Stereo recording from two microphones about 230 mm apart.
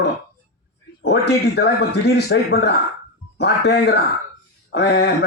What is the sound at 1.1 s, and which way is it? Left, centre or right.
A man's voice, left.